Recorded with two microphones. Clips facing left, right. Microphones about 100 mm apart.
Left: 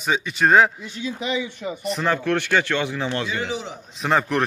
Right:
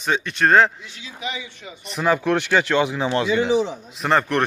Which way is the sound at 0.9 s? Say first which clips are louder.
Left 8 dB; 40° left (ahead or behind).